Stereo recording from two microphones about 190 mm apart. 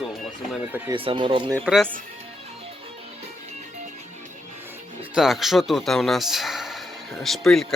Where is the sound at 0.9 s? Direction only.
25° right (ahead or behind).